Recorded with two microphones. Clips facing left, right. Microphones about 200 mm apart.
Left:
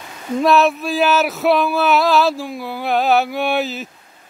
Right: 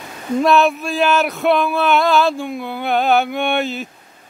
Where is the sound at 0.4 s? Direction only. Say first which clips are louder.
Even; centre (ahead or behind).